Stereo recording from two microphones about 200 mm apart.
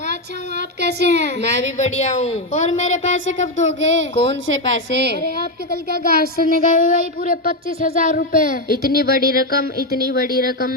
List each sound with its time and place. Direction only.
0.8 s a woman's voice: 55° right (ahead or behind)
1.6 s a woman's voice: 35° left (ahead or behind)
3.8 s a child's voice: 70° right (ahead or behind)
5.9 s a child's voice: 50° right (ahead or behind)
6.3 s a sound: 45° left (ahead or behind)